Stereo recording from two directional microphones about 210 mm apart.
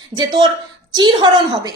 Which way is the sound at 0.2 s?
20° right (ahead or behind).